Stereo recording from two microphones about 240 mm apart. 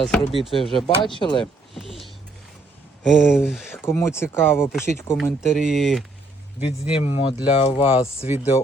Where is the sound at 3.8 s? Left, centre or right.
Centre.